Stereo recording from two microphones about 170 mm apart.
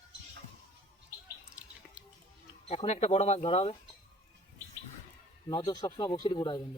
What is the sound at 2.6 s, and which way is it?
Speech, 40° left (ahead or behind).